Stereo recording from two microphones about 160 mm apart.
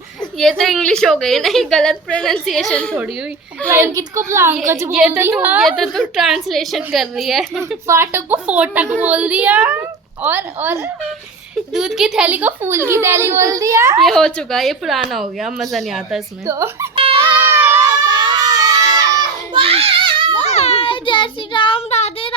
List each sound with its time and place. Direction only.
0.3 s a woman's voice: 5° left (ahead or behind)
3.7 s a woman's voice: 15° right (ahead or behind)
4.9 s a woman's voice: 5° right (ahead or behind)
5.6 s a woman's voice: centre (ahead or behind)
7.9 s a woman's voice: 15° right (ahead or behind)
11.7 s a woman's voice: 5° right (ahead or behind)
14.0 s a woman's voice: 5° left (ahead or behind)
16.5 s speech: 20° right (ahead or behind)
17.6 s a sound: 20° right (ahead or behind)
18.0 s baby cry: 25° right (ahead or behind)
19.5 s a sound: 35° right (ahead or behind)
20.3 s a sound: 45° left (ahead or behind)